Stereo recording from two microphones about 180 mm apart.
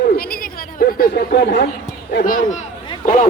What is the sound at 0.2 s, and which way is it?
Chatter, 55° left (ahead or behind).